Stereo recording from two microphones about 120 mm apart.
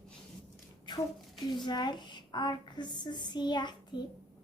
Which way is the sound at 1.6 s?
40° left (ahead or behind).